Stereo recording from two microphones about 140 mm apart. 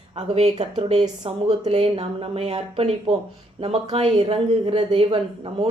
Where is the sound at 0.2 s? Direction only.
50° right (ahead or behind).